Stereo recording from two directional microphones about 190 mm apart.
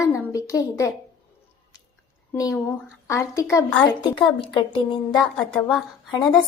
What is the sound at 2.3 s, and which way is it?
A woman's voice, 15° left (ahead or behind).